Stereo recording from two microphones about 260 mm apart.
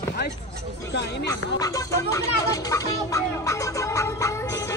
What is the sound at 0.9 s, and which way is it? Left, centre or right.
Speech, left.